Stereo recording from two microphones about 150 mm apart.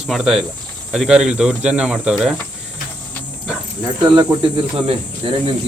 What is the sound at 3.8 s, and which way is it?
Speech, 30° right (ahead or behind).